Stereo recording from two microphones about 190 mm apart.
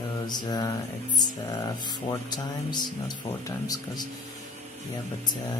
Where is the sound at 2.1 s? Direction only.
20° left (ahead or behind).